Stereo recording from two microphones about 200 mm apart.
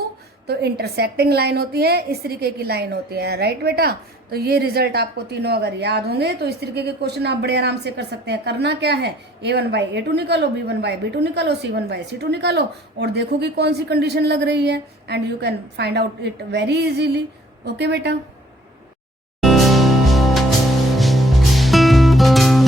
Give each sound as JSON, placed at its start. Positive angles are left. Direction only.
{"t": 0.4, "sound": "a woman's voice", "side_deg": -55}
{"t": 19.4, "sound": "music", "side_deg": 0}